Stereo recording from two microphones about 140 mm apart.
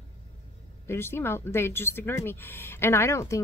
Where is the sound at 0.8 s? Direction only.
15° left (ahead or behind).